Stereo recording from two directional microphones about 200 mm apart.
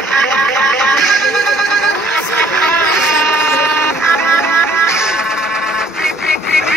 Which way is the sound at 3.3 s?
10° left (ahead or behind).